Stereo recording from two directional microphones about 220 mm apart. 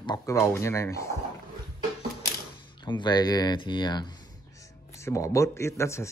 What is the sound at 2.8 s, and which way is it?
Speech, 20° left (ahead or behind).